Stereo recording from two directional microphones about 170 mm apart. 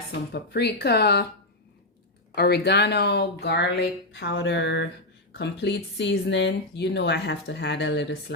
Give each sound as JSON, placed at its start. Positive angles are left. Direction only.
{"t": 0.1, "sound": "speech", "side_deg": 75}
{"t": 2.3, "sound": "speech", "side_deg": 75}